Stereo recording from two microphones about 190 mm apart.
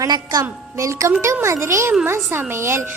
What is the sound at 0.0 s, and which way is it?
A woman's voice, 20° right (ahead or behind).